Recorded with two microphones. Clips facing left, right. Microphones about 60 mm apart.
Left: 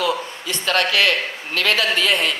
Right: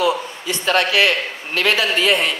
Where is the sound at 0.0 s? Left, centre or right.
Right.